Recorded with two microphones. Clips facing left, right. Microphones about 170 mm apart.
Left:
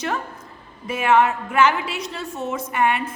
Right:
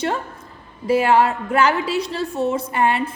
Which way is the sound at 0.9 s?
35° right (ahead or behind).